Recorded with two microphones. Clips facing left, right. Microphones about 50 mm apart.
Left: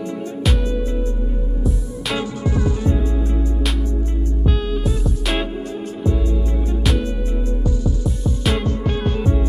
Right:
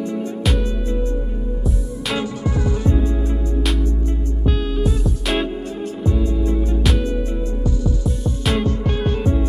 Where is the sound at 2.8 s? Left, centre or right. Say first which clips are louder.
Right 3 dB; right.